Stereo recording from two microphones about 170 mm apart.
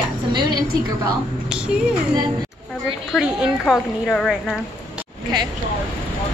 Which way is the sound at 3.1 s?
Centre (ahead or behind).